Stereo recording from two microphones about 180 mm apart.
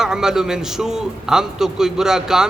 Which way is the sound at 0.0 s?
5° right (ahead or behind).